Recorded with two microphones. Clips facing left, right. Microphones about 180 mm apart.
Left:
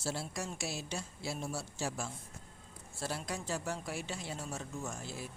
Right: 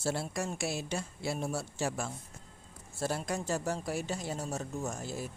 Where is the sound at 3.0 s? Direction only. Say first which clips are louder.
Right 5 dB; 45° right (ahead or behind).